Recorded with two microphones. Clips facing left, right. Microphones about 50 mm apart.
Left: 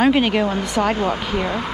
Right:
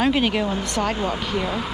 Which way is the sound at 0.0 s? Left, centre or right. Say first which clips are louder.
Left 4 dB; centre.